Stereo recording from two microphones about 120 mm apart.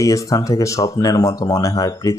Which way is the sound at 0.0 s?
25° left (ahead or behind).